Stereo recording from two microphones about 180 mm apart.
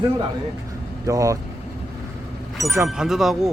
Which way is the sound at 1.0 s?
15° right (ahead or behind).